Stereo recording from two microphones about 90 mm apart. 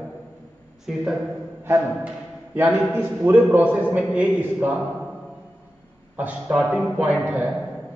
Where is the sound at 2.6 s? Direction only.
20° right (ahead or behind).